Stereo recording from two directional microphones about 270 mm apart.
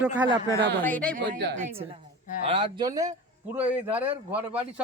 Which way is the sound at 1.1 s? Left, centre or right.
Right.